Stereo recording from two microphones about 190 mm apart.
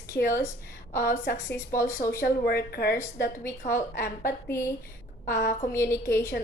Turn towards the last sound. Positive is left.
turn(degrees=15)  # may be behind; listen again after turning